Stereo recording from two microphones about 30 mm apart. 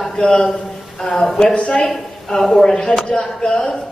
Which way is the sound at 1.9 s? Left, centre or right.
Centre.